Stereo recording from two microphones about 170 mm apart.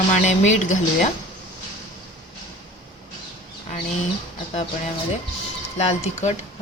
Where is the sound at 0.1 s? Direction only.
45° left (ahead or behind).